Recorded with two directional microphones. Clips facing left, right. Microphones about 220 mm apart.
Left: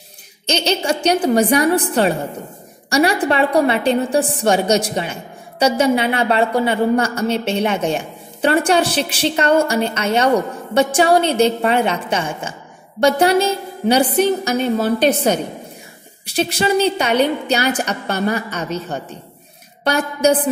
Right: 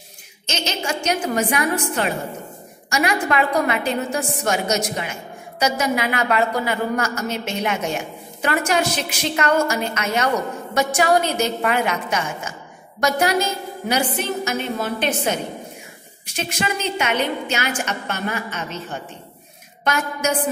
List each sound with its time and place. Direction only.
0.5 s a woman's voice: 35° left (ahead or behind)